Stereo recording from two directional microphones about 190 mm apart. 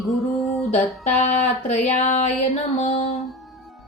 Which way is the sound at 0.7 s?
35° left (ahead or behind).